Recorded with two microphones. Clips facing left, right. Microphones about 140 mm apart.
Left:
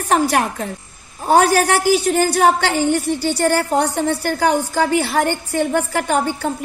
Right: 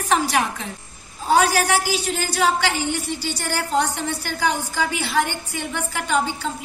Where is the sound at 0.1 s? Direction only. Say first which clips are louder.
Left 4 dB; 55° left (ahead or behind).